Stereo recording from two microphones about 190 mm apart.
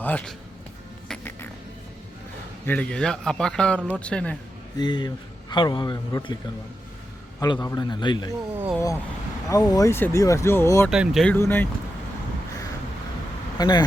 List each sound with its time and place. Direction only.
0.0 s speech: 10° left (ahead or behind)
1.0 s music: 5° left (ahead or behind)
2.6 s a man's voice: 5° left (ahead or behind)
4.8 s a man's voice: 20° left (ahead or behind)
7.3 s a man's voice: 20° left (ahead or behind)
8.5 s speech: 10° right (ahead or behind)
9.5 s speech: 20° left (ahead or behind)
10.8 s a man's voice: centre (ahead or behind)
11.3 s speech: 10° left (ahead or behind)
13.6 s a man's voice: 25° left (ahead or behind)